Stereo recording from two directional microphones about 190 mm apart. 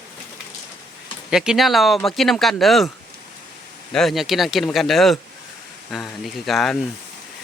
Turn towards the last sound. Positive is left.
turn(degrees=0)  # may be behind; listen again after turning